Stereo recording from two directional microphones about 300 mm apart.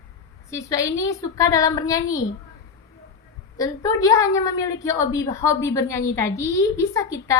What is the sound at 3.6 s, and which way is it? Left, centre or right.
A woman's voice, centre.